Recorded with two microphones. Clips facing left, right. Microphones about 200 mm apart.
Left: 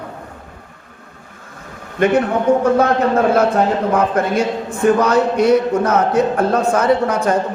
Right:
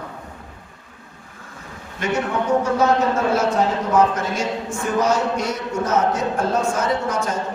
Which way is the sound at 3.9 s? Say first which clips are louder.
Even; 60° left (ahead or behind).